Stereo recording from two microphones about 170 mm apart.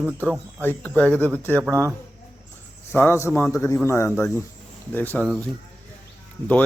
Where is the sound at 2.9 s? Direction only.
15° left (ahead or behind).